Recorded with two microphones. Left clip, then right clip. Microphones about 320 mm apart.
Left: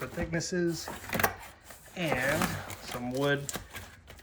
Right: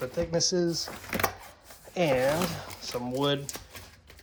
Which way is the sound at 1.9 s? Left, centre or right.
Centre.